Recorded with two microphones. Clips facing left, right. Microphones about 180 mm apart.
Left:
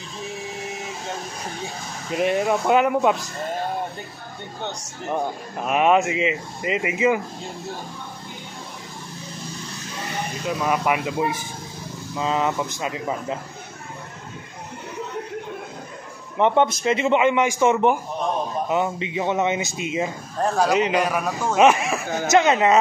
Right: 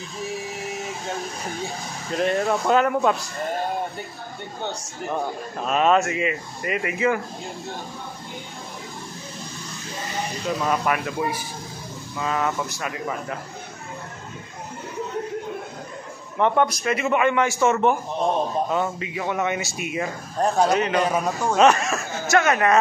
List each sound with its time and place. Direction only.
2.0 s speech: 10° left (ahead or behind)
5.1 s speech: 15° left (ahead or behind)
10.6 s a man's voice: 10° left (ahead or behind)
16.3 s a man's voice: 20° left (ahead or behind)
20.3 s a man's voice: 20° right (ahead or behind)
20.7 s speech: 15° left (ahead or behind)
21.0 s a man's voice: 20° right (ahead or behind)
21.5 s speech: 15° left (ahead or behind)